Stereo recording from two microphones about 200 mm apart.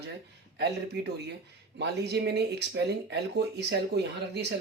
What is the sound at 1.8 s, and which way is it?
Speech, 55° right (ahead or behind).